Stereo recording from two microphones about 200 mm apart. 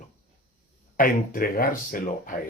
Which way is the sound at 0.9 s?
45° left (ahead or behind).